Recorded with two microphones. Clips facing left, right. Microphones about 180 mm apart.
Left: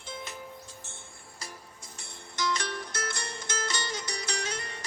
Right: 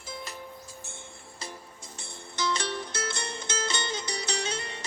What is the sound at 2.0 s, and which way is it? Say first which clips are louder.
Music: right 1 dB; 25° right (ahead or behind).